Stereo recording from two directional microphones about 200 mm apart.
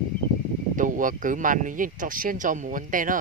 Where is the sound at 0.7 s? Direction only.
40° right (ahead or behind).